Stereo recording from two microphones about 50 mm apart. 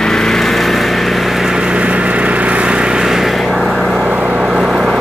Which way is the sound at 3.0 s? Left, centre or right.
Centre.